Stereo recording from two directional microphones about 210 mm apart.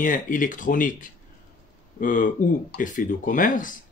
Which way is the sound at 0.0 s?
40° left (ahead or behind).